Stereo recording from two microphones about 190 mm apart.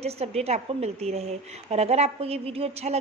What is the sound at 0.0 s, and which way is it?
A woman's voice, 35° right (ahead or behind).